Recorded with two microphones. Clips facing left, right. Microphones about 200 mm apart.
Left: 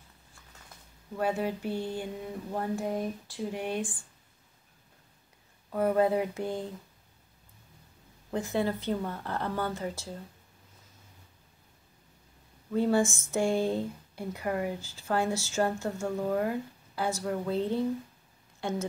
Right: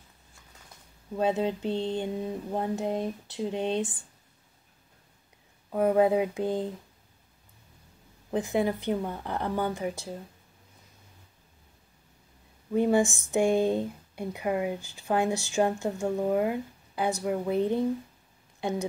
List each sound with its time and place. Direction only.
1.1 s a sound: 20° right (ahead or behind)
5.7 s speech: 15° right (ahead or behind)
8.3 s speech: 15° right (ahead or behind)
12.7 s speech: 15° right (ahead or behind)